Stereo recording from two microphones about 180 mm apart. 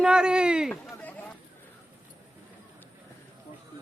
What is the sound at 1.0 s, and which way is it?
Chatter, 10° left (ahead or behind).